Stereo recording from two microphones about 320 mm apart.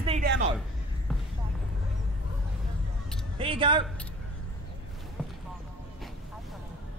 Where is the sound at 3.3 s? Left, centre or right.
Centre.